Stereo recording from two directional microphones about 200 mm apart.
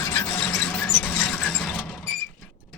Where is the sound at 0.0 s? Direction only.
10° left (ahead or behind).